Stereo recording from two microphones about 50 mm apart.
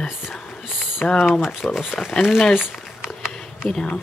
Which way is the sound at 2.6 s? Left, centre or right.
Centre.